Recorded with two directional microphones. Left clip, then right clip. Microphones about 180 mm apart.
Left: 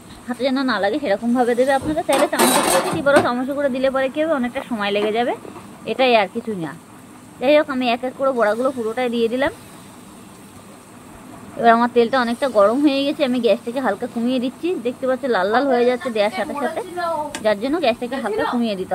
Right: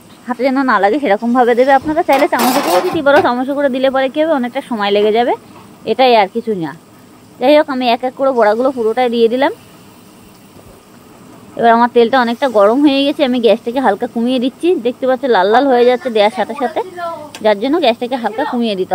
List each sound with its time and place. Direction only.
0.3 s speech: 50° right (ahead or behind)
11.6 s speech: 45° right (ahead or behind)